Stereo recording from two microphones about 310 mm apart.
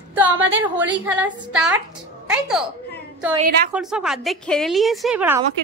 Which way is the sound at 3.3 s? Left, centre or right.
Right.